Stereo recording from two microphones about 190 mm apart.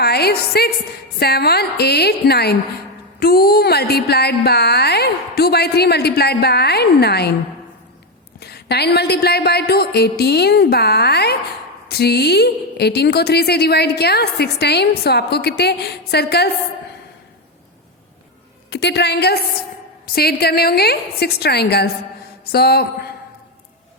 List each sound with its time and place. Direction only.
0.0 s a woman's voice: 55° left (ahead or behind)
8.4 s a woman's voice: 60° left (ahead or behind)
18.7 s a woman's voice: 60° left (ahead or behind)